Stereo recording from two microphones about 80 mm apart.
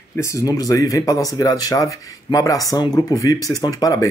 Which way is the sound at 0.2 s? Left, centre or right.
Left.